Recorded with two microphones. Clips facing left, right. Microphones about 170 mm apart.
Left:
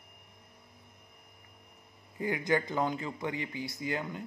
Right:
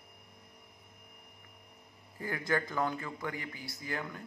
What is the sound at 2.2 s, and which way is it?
Speech, 20° left (ahead or behind).